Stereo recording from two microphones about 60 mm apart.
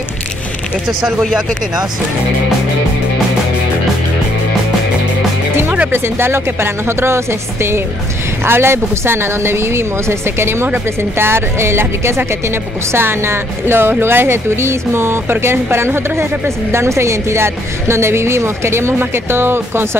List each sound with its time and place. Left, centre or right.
1.0 s speech: centre
5.9 s speech: right
8.5 s a woman's voice: right